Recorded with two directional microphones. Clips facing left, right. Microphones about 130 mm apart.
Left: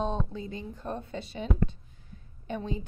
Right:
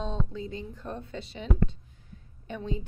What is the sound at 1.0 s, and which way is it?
A woman's voice, 40° left (ahead or behind).